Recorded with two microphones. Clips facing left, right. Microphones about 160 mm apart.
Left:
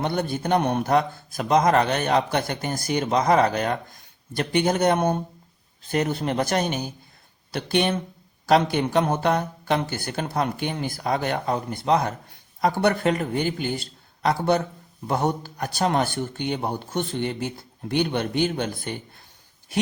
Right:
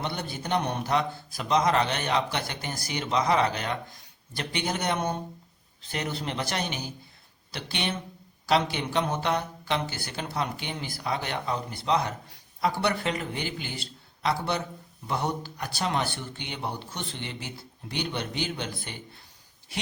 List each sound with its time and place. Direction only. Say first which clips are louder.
0.0 s speech: left 8 dB; 50° left (ahead or behind)